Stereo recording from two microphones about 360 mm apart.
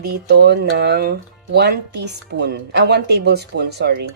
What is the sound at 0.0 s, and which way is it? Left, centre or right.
A woman's voice, right.